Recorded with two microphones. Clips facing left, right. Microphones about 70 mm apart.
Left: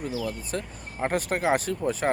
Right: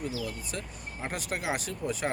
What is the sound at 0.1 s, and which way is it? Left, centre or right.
Speech, left.